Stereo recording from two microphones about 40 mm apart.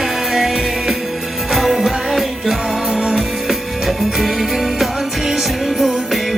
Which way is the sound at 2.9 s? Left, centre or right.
Centre.